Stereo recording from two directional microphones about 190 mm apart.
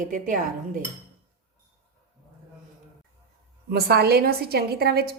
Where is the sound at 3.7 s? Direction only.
55° right (ahead or behind).